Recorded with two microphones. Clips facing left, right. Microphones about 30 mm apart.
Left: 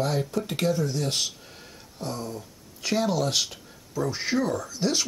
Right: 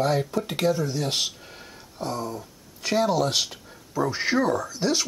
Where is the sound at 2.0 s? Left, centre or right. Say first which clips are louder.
Right 3 dB; centre.